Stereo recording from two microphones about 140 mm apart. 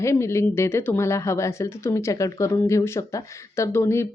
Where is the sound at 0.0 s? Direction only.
20° left (ahead or behind).